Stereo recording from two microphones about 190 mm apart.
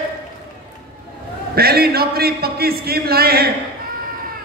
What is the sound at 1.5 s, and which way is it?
A man's voice, 55° right (ahead or behind).